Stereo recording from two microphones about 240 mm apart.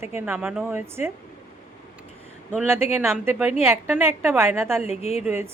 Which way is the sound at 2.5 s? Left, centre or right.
Centre.